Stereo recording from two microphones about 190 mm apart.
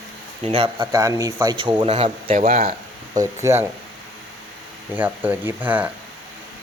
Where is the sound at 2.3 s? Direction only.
45° right (ahead or behind).